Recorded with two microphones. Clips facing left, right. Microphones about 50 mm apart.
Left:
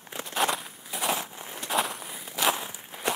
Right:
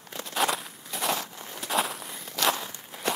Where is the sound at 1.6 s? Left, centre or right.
Centre.